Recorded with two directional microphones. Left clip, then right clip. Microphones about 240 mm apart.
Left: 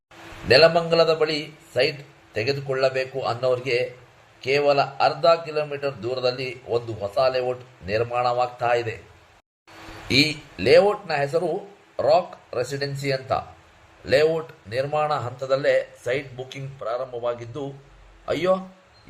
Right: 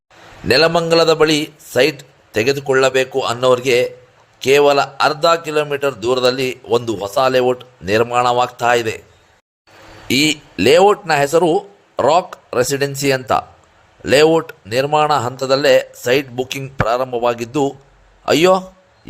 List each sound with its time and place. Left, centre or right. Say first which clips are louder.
0.4 s a man's voice: right 3 dB; right
10.1 s a man's voice: right 5 dB; right